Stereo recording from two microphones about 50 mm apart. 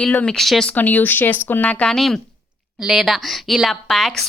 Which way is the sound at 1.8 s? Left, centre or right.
Centre.